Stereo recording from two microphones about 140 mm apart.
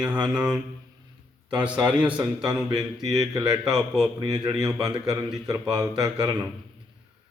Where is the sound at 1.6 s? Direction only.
10° right (ahead or behind).